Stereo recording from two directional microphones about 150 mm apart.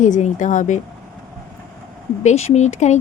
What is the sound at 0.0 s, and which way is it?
Speech, 55° left (ahead or behind).